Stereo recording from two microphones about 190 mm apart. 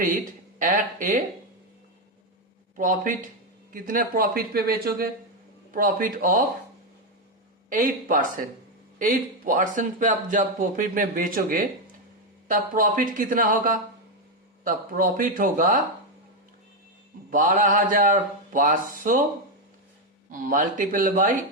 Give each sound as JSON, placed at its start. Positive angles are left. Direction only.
{"t": 0.6, "sound": "speech", "side_deg": -45}
{"t": 2.7, "sound": "speech", "side_deg": -45}
{"t": 7.7, "sound": "speech", "side_deg": -45}
{"t": 17.3, "sound": "speech", "side_deg": -45}
{"t": 20.3, "sound": "speech", "side_deg": -45}